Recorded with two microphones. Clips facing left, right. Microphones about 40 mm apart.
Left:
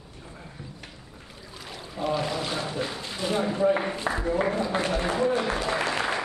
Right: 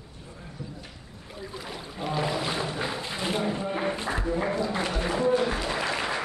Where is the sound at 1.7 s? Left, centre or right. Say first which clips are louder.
Left 4 dB; centre.